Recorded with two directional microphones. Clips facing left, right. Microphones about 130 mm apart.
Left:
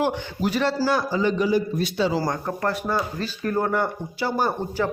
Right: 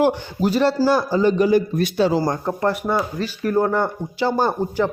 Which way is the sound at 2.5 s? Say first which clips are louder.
Right 4 dB; 20° right (ahead or behind).